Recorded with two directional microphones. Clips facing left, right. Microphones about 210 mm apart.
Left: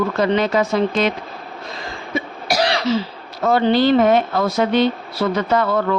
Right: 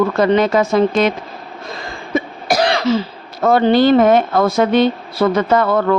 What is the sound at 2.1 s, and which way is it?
Cough, 50° right (ahead or behind).